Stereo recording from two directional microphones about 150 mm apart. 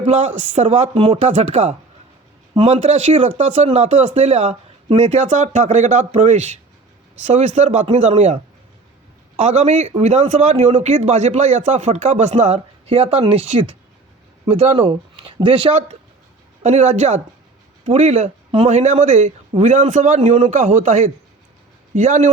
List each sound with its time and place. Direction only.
0.0 s a man's voice: 50° right (ahead or behind)
16.6 s a man's voice: 50° right (ahead or behind)